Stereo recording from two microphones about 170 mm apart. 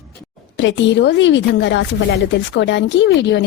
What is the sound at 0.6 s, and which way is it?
A woman's voice, 90° left.